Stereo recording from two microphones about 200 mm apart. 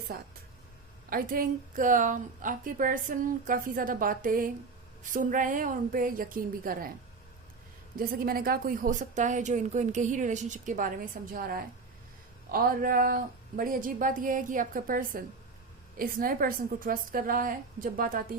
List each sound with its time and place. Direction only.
0.1 s a woman's voice: 50° right (ahead or behind)
7.9 s a woman's voice: 45° right (ahead or behind)